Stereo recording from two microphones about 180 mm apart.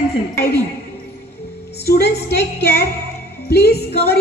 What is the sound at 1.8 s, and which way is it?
Speech, 60° left (ahead or behind).